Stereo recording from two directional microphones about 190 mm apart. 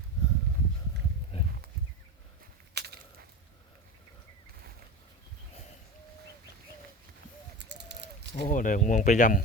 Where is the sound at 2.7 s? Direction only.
60° right (ahead or behind).